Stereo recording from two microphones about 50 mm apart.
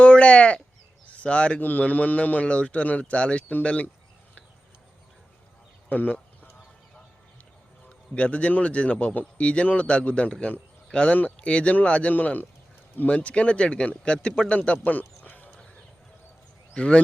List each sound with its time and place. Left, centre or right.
0.0 s sheep: left
1.0 s speech: left
1.6 s a man's voice: left
5.9 s a sound: left
7.9 s a man's voice: left
14.9 s a sound: left
16.7 s speech: left